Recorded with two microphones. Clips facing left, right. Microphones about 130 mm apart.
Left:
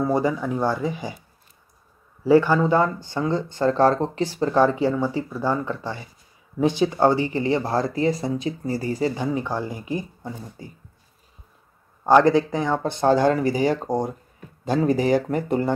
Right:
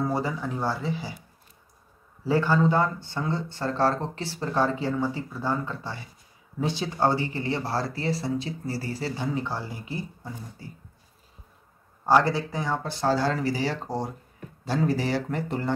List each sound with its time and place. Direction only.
0.1 s speech: 15° left (ahead or behind)
2.2 s speech: 15° left (ahead or behind)
12.2 s speech: 20° left (ahead or behind)